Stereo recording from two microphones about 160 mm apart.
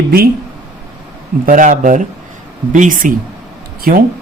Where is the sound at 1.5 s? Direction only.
55° right (ahead or behind).